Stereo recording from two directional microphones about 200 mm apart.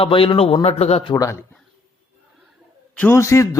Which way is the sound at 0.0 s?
25° left (ahead or behind).